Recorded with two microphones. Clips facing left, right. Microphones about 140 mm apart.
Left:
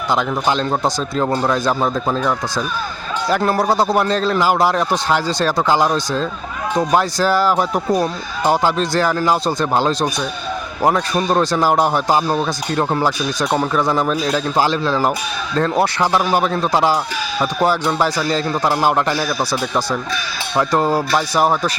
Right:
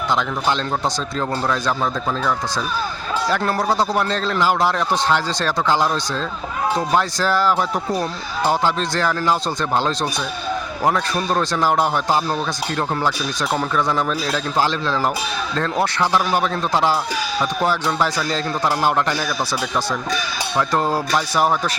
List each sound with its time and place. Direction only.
0.1 s speech: 5° left (ahead or behind); by 2.3 s 25° left (ahead or behind)
3.2 s a man's voice: 10° left (ahead or behind)
20.6 s speech: 10° left (ahead or behind)